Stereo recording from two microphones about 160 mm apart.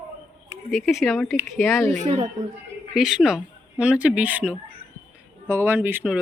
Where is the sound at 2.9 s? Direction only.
5° right (ahead or behind).